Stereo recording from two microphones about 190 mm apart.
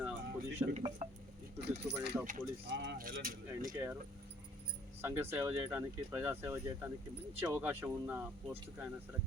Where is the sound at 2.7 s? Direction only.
65° right (ahead or behind).